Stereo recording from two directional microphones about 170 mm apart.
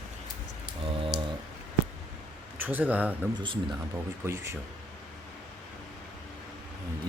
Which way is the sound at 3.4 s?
30° right (ahead or behind).